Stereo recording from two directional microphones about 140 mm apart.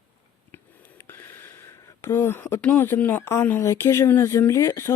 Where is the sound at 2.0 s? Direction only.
15° left (ahead or behind).